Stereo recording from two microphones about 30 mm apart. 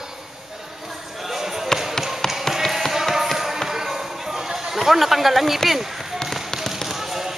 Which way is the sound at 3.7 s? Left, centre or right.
Centre.